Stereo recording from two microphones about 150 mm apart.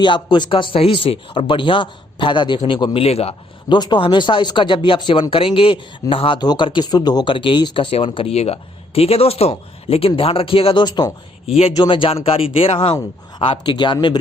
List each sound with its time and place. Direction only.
0.0 s speech: 30° left (ahead or behind)
3.8 s speech: 30° left (ahead or behind)